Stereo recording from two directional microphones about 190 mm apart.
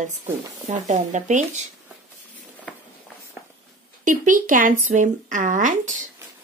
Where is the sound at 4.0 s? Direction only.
45° right (ahead or behind).